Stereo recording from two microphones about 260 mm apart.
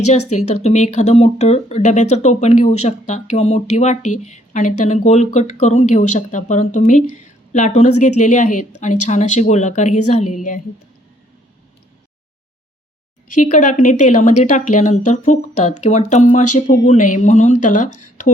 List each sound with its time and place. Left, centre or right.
0.3 s a woman's voice: left
13.3 s speech: left